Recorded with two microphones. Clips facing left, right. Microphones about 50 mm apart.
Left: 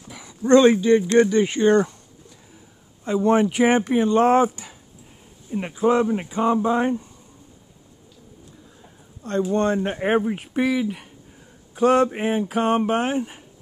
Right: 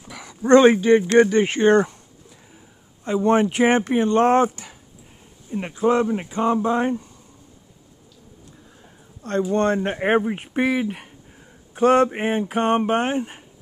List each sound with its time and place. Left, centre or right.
0.1 s dog: right
0.4 s speech: right
3.1 s speech: centre
9.2 s speech: right
9.8 s speech: right
11.7 s a sound: right
12.8 s speech: right